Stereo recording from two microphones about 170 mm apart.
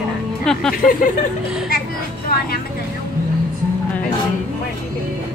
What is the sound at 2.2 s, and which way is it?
Speech, 60° left (ahead or behind).